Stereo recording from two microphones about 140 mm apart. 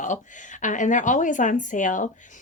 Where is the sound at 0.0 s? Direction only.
65° left (ahead or behind).